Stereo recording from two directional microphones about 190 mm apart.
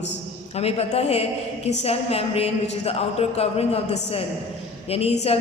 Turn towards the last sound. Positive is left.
turn(degrees=30)  # may be behind; listen again after turning